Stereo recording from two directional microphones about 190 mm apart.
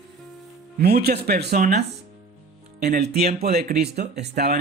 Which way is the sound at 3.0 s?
35° right (ahead or behind).